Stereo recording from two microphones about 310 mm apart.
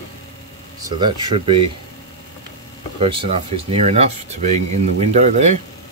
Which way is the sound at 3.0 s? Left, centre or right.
Centre.